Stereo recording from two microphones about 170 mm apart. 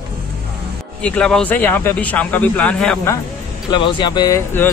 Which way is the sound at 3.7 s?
30° left (ahead or behind).